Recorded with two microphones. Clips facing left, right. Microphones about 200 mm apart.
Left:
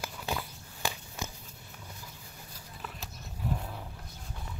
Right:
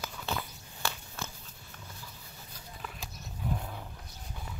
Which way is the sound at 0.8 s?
15° left (ahead or behind).